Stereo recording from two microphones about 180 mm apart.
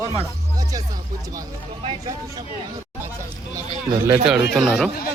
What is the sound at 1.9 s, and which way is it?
Speech, 25° right (ahead or behind).